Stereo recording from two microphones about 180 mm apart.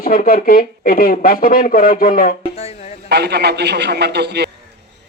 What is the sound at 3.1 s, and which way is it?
A man's voice, 70° right (ahead or behind).